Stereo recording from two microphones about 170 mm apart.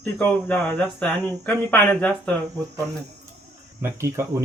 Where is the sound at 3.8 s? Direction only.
15° right (ahead or behind).